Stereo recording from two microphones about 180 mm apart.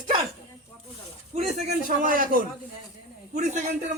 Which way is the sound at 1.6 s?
50° right (ahead or behind).